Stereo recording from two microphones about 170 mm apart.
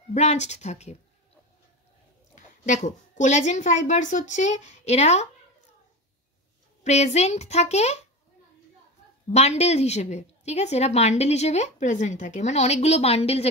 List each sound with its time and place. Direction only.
0.1 s a woman's voice: 40° left (ahead or behind)
2.3 s a woman's voice: 45° left (ahead or behind)
6.8 s a woman's voice: 40° left (ahead or behind)
9.3 s a woman's voice: 40° left (ahead or behind)